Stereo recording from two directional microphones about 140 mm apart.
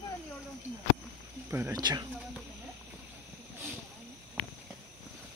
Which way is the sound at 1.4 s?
15° right (ahead or behind).